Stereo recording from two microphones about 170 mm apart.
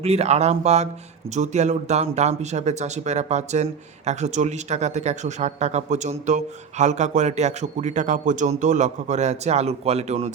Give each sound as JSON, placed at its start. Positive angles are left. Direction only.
{"t": 0.0, "sound": "speech", "side_deg": -40}